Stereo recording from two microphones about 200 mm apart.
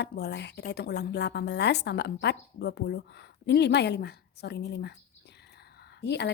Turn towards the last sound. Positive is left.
turn(degrees=55)  # may be behind; listen again after turning